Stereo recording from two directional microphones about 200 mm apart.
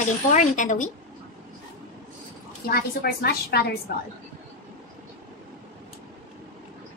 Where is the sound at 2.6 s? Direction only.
50° left (ahead or behind).